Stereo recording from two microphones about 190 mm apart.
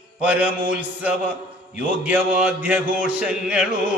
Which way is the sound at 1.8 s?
10° right (ahead or behind).